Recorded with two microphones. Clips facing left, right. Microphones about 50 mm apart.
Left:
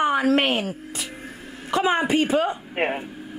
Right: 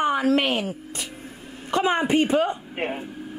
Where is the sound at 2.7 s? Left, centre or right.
Left.